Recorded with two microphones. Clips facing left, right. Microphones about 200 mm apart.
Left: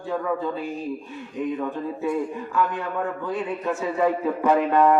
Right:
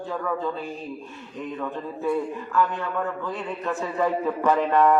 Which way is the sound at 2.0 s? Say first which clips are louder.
Right 1 dB; 25° left (ahead or behind).